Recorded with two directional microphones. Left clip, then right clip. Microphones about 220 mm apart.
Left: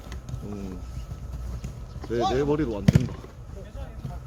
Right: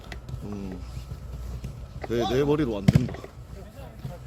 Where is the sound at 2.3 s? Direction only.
50° right (ahead or behind).